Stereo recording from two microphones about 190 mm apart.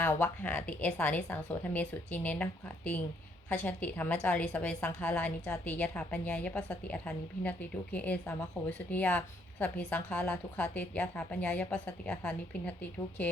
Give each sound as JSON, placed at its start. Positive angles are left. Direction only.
{"t": 0.0, "sound": "a woman's voice", "side_deg": 10}